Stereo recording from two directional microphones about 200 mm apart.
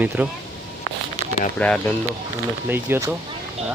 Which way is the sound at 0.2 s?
10° right (ahead or behind).